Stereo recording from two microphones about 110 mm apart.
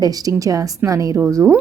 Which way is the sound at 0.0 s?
35° right (ahead or behind).